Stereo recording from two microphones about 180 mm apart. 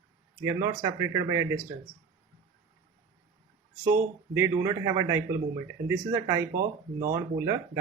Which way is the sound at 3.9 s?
15° right (ahead or behind).